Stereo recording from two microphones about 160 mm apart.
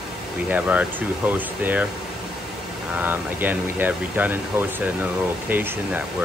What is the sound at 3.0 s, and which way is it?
Speech, 10° right (ahead or behind).